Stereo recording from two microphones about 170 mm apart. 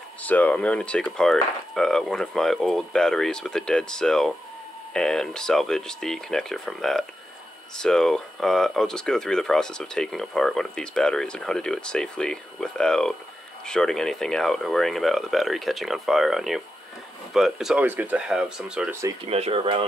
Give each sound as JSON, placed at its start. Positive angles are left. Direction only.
{"t": 0.2, "sound": "speech", "side_deg": 10}
{"t": 19.2, "sound": "speech", "side_deg": -35}